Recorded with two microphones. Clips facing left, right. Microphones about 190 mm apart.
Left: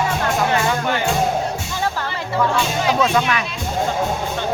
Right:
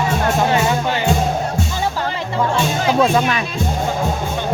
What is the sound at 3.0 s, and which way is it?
Speech, 35° right (ahead or behind).